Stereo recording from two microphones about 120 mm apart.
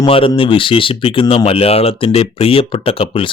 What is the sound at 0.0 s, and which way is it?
Speech, 50° left (ahead or behind).